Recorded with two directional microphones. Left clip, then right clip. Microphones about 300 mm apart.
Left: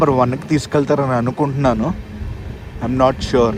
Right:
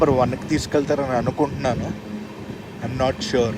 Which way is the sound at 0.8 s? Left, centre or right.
Right.